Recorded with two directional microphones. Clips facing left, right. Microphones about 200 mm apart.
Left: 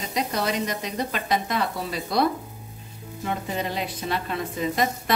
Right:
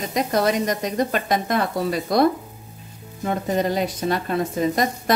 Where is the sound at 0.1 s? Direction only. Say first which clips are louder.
Right 6 dB; 45° right (ahead or behind).